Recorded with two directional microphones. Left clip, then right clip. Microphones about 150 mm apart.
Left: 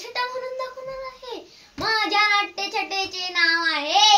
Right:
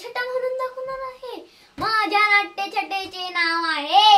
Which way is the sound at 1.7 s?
20° right (ahead or behind).